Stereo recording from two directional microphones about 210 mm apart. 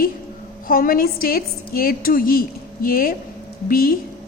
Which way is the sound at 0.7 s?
45° left (ahead or behind).